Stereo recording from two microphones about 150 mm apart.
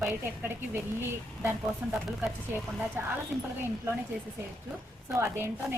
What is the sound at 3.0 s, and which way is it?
Speech, 15° right (ahead or behind).